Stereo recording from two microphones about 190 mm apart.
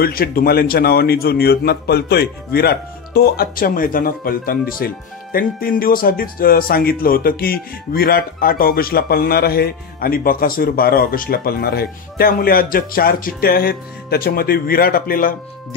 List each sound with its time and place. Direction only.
0.0 s speech: 50° left (ahead or behind)